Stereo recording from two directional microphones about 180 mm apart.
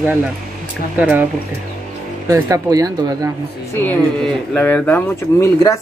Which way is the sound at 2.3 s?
20° right (ahead or behind).